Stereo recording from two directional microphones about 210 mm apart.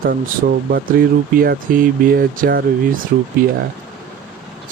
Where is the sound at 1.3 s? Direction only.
45° right (ahead or behind).